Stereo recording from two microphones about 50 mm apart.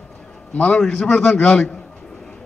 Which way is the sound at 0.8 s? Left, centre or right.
Centre.